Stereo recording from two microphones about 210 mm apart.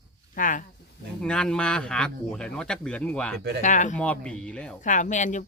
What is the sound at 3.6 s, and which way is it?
Speech, 35° left (ahead or behind).